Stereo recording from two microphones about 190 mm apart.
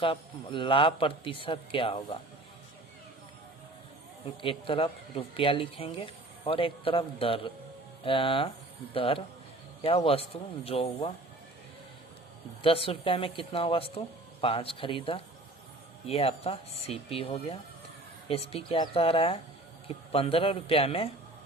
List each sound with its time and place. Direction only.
0.0 s speech: 25° left (ahead or behind)
4.4 s speech: 25° left (ahead or behind)
12.6 s speech: 30° left (ahead or behind)